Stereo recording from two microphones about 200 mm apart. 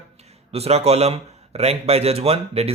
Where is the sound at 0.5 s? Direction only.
30° right (ahead or behind).